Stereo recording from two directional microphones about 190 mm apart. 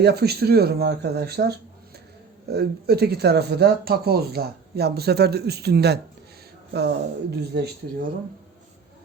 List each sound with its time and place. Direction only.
0.0 s speech: 60° right (ahead or behind)